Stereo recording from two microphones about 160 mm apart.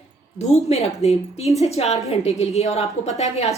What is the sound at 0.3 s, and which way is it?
A woman's voice, 40° left (ahead or behind).